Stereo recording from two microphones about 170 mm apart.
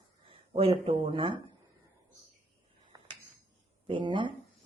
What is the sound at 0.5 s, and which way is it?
Speech, 35° right (ahead or behind).